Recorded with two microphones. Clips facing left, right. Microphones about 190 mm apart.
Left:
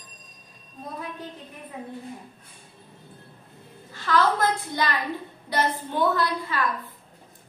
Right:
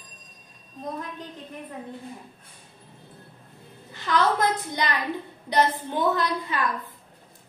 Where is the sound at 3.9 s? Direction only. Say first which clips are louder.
Left 1 dB; 15° right (ahead or behind).